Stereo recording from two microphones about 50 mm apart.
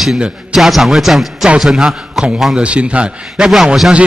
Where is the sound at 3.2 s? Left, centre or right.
Centre.